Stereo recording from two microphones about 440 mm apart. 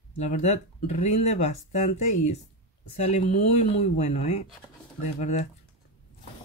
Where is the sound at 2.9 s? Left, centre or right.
Centre.